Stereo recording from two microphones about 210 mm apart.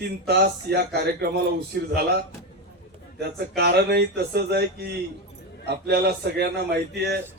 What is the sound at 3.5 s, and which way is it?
Speech, 50° right (ahead or behind).